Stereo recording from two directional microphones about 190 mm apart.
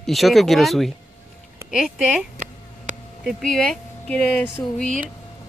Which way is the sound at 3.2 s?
Centre (ahead or behind).